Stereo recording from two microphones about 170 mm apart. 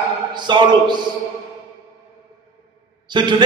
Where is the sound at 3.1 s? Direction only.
25° right (ahead or behind).